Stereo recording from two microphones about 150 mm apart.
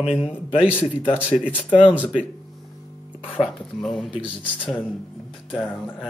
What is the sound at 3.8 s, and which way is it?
Speech, centre (ahead or behind).